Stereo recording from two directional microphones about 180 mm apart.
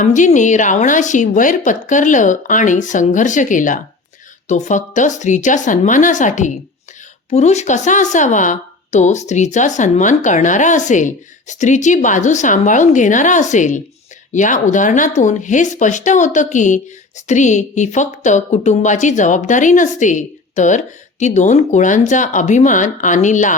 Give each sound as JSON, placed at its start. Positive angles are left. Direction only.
{"t": 0.0, "sound": "speech", "side_deg": 45}